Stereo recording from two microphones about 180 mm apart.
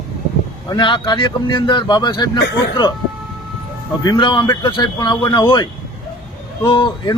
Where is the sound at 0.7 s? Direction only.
25° left (ahead or behind).